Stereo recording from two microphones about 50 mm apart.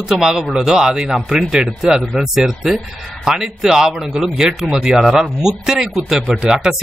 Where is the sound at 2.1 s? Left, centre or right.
Centre.